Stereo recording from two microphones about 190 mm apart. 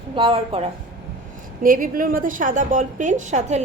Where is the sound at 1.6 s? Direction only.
45° right (ahead or behind).